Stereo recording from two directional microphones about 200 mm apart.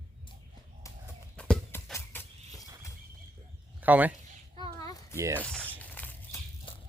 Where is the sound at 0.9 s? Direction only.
15° left (ahead or behind).